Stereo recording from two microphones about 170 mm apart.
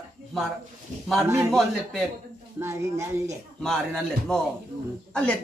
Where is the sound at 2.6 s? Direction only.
15° right (ahead or behind).